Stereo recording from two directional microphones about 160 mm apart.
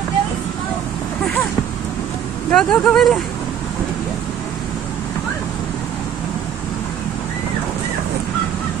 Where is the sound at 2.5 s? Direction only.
5° left (ahead or behind).